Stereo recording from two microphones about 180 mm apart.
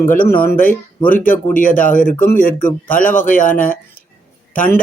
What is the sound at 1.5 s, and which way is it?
Speech, 50° left (ahead or behind).